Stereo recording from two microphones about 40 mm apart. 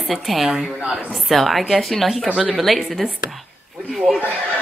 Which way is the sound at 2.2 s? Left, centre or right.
Centre.